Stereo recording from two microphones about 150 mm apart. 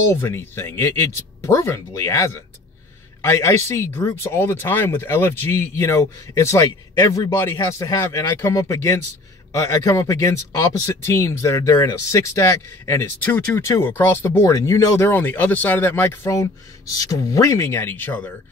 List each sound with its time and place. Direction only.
0.1 s speech: 15° left (ahead or behind)